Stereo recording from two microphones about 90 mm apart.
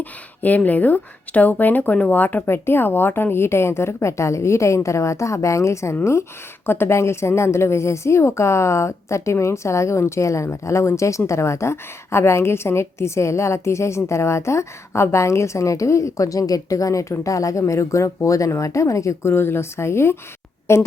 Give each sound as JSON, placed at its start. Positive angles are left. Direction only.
{"t": 0.0, "sound": "a woman's voice", "side_deg": 20}